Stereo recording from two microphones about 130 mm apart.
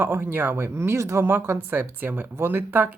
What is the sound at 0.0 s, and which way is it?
Speech, 15° right (ahead or behind).